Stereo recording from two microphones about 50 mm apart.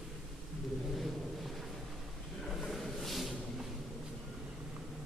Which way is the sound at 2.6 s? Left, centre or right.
Centre.